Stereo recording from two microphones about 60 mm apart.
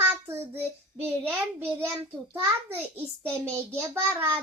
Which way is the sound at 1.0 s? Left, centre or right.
Right.